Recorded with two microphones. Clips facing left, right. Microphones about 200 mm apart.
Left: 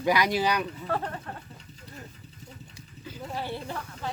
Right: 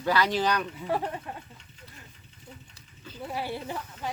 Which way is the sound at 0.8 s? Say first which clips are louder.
Right 1 dB; 10° right (ahead or behind).